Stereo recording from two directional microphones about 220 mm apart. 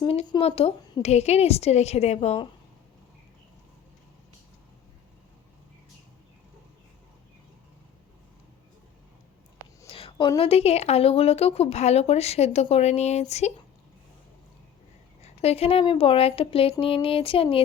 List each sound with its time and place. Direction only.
0.0 s a woman's voice: 25° left (ahead or behind)
9.8 s a woman's voice: 25° left (ahead or behind)
15.2 s a woman's voice: 25° left (ahead or behind)